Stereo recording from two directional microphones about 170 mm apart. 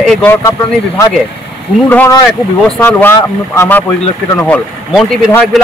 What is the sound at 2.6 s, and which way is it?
Speech, 10° left (ahead or behind).